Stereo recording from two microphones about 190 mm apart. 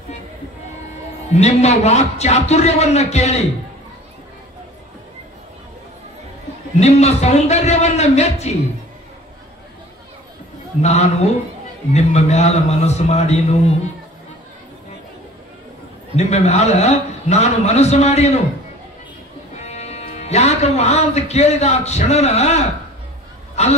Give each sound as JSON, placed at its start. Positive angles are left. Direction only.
{"t": 1.3, "sound": "a man's voice", "side_deg": 35}
{"t": 6.8, "sound": "a man's voice", "side_deg": 35}
{"t": 10.8, "sound": "a man's voice", "side_deg": 35}
{"t": 16.2, "sound": "a man's voice", "side_deg": 35}
{"t": 19.6, "sound": "a man's voice", "side_deg": 35}